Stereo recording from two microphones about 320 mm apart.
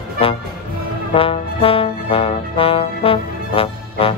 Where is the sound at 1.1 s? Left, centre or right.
Centre.